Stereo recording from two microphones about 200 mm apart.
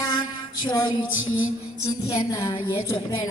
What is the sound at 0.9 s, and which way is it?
Music, 80° left.